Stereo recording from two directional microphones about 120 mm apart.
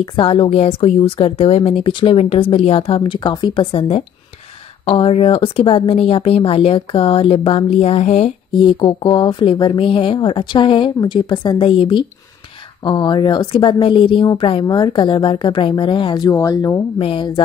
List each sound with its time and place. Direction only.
0.0 s a woman's voice: 45° left (ahead or behind)
8.5 s a woman's voice: 40° left (ahead or behind)
17.0 s a woman's voice: 45° left (ahead or behind)